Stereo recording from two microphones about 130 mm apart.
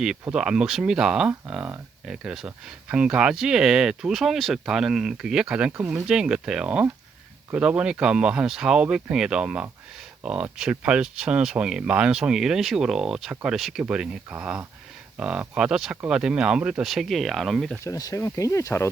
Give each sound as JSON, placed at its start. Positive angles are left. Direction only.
{"t": 0.0, "sound": "speech", "side_deg": -5}
{"t": 17.8, "sound": "speech", "side_deg": 25}